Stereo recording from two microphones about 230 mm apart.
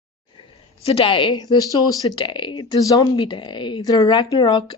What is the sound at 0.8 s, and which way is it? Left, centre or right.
Speech, left.